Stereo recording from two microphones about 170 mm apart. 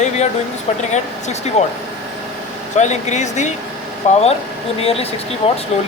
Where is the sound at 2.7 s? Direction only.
45° left (ahead or behind).